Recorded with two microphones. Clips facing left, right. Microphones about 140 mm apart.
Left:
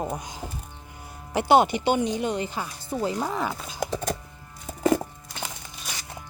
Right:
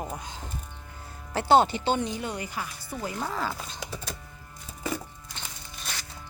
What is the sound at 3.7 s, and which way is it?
Music, 50° left (ahead or behind).